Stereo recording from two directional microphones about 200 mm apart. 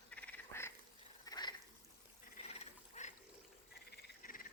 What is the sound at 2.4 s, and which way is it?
Frog, 35° left (ahead or behind).